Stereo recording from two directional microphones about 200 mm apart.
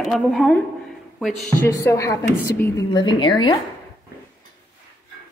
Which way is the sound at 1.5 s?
15° left (ahead or behind).